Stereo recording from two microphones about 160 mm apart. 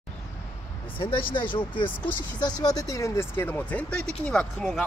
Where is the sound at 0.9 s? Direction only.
35° left (ahead or behind); by 4.8 s centre (ahead or behind).